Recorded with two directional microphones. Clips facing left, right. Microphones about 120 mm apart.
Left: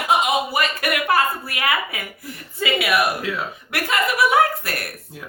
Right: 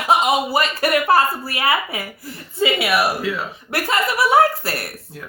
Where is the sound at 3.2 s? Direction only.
Centre (ahead or behind).